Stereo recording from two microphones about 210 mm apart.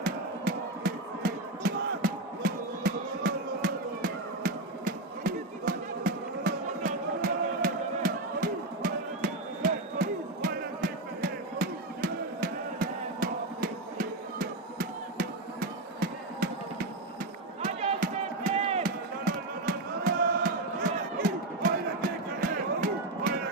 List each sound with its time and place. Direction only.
0.0 s music: 45° right (ahead or behind)
17.6 s music: 30° right (ahead or behind)
18.5 s a sound: 30° right (ahead or behind)
18.8 s music: 45° right (ahead or behind)